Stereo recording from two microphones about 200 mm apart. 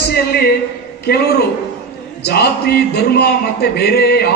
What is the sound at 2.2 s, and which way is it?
A man's voice, 55° left (ahead or behind).